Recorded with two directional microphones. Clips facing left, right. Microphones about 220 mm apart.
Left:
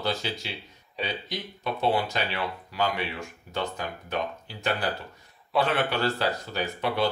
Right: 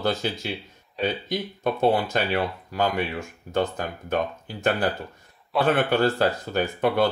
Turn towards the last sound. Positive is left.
turn(degrees=-50)  # may be behind; listen again after turning